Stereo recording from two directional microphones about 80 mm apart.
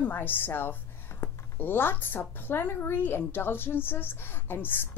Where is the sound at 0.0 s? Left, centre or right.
Left.